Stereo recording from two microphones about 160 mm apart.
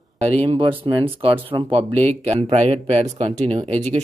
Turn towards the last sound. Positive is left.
turn(degrees=-45)  # may be behind; listen again after turning